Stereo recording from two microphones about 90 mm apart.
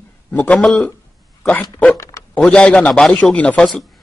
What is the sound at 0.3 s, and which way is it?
A man's voice, 15° left (ahead or behind).